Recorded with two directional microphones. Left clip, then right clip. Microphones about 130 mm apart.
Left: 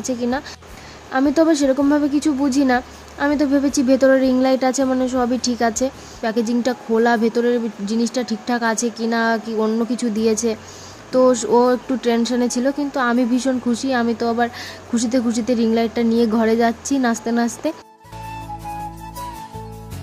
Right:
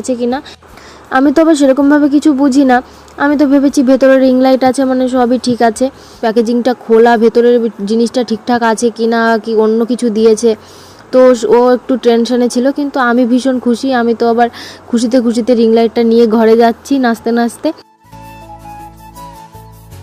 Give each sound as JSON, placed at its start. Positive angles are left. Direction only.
{"t": 0.0, "sound": "speech", "side_deg": -25}